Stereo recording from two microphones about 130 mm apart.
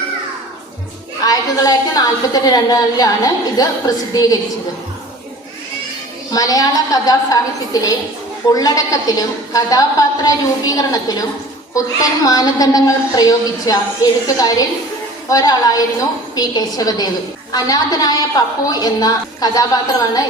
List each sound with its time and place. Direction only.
1.2 s a woman's voice: 30° left (ahead or behind)
6.3 s a woman's voice: 30° left (ahead or behind)
12.2 s a woman's voice: 30° left (ahead or behind)